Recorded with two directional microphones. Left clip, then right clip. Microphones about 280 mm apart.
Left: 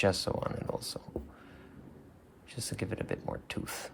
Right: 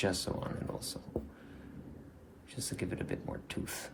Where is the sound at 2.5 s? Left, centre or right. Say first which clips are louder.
Left 2 dB; left.